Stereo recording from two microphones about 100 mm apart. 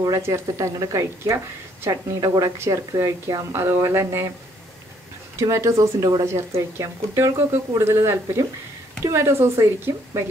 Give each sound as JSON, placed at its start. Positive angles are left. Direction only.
{"t": 0.0, "sound": "a woman's voice", "side_deg": -30}
{"t": 3.5, "sound": "speech", "side_deg": -25}
{"t": 5.4, "sound": "a woman's voice", "side_deg": -30}